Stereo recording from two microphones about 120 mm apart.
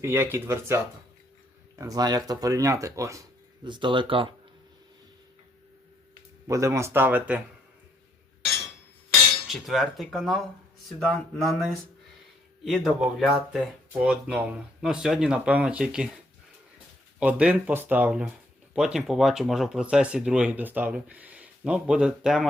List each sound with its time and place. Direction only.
0.0 s speech: 20° right (ahead or behind)
1.8 s speech: 30° right (ahead or behind)
3.6 s speech: 40° right (ahead or behind)
6.5 s speech: 25° right (ahead or behind)
9.5 s speech: centre (ahead or behind)
17.2 s speech: 10° right (ahead or behind)